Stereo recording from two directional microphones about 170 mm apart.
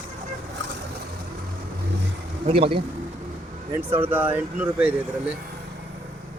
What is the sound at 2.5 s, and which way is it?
Speech, 35° right (ahead or behind).